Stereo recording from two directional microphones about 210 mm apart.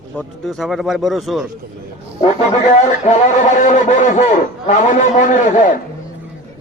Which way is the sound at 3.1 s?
35° left (ahead or behind).